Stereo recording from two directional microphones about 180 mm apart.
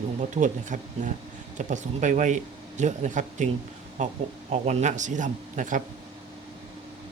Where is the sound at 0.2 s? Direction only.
40° right (ahead or behind).